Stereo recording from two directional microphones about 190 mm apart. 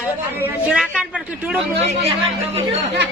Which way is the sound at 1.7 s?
35° right (ahead or behind).